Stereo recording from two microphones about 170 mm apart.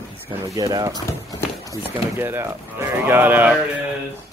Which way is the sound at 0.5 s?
20° right (ahead or behind).